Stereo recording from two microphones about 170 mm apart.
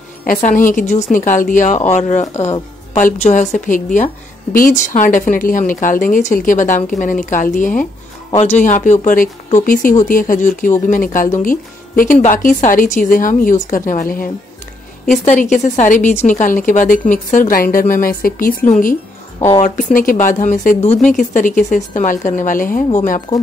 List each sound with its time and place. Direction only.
0.2 s a woman's voice: 50° left (ahead or behind)
15.0 s a woman's voice: 45° left (ahead or behind)